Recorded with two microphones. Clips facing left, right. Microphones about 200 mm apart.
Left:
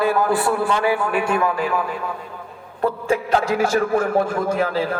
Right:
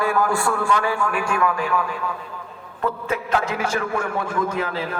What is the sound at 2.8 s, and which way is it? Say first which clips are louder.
A man's voice: left 4 dB; 35° left (ahead or behind).